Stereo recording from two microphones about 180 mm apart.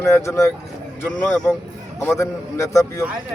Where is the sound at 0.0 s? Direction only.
15° left (ahead or behind).